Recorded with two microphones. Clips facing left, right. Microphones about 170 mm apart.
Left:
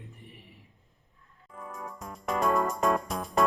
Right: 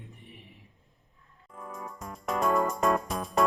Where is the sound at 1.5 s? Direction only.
Centre (ahead or behind).